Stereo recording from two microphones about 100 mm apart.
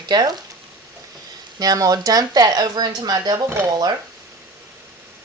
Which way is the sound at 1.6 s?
40° right (ahead or behind).